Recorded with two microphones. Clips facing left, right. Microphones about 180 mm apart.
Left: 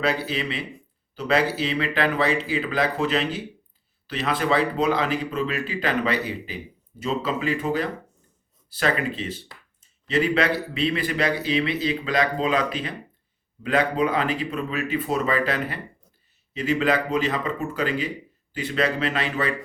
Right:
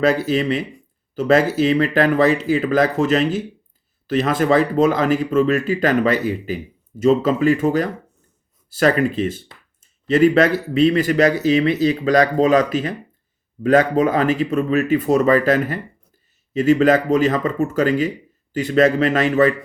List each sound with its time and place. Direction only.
0.0 s speech: 45° right (ahead or behind)